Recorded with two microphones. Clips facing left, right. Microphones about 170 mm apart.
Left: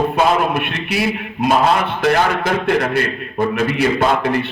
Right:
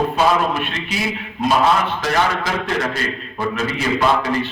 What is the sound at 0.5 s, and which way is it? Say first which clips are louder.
A man's voice: left 4 dB; 60° left (ahead or behind).